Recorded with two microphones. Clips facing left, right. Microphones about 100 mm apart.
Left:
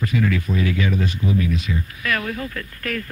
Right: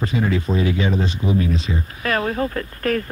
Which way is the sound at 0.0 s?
25° right (ahead or behind).